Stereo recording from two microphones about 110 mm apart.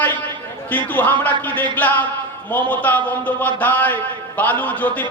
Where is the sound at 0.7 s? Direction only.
15° left (ahead or behind).